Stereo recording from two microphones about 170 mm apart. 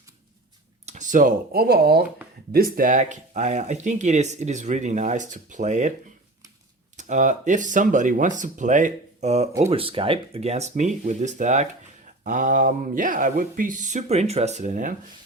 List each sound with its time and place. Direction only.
0.9 s speech: 45° right (ahead or behind)
6.9 s speech: 45° right (ahead or behind)